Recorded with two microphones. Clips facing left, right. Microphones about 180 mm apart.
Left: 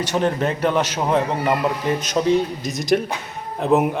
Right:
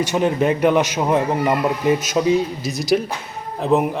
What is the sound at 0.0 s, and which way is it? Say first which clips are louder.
A man's voice: right 2 dB; 10° right (ahead or behind).